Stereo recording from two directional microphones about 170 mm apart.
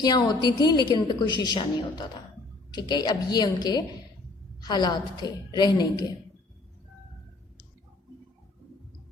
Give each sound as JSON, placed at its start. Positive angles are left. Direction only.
{"t": 0.0, "sound": "a woman's voice", "side_deg": 25}